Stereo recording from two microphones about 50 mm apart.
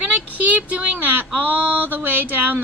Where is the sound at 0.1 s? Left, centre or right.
Right.